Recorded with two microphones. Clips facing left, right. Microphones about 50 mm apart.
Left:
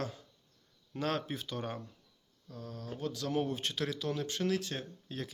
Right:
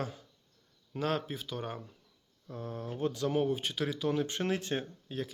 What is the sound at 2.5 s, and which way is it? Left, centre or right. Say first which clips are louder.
Speech: right 4 dB; right.